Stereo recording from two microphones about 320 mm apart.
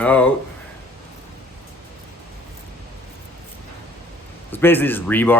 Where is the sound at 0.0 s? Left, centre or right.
Centre.